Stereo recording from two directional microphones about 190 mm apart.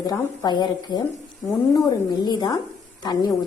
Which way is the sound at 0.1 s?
20° left (ahead or behind).